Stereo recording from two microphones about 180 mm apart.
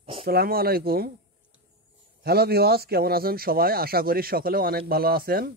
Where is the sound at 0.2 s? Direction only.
60° right (ahead or behind).